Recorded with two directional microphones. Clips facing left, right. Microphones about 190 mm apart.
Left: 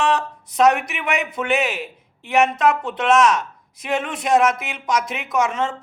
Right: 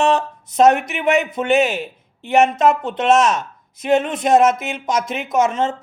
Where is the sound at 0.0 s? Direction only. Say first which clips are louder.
Right 3 dB; 25° right (ahead or behind).